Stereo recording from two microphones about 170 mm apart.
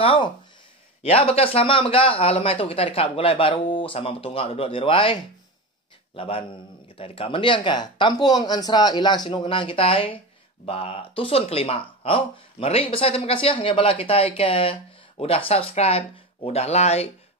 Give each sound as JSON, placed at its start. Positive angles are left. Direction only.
{"t": 0.0, "sound": "speech", "side_deg": 30}